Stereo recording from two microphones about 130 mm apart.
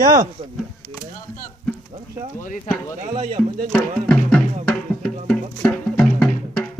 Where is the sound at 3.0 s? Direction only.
70° right (ahead or behind).